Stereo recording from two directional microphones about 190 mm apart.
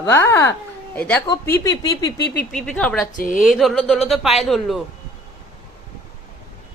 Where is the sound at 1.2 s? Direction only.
15° left (ahead or behind).